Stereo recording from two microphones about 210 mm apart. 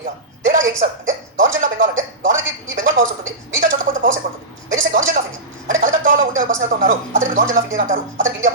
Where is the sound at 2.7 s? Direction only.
40° right (ahead or behind).